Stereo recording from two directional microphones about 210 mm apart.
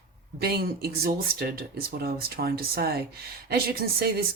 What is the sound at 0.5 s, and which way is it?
Speech, 50° right (ahead or behind).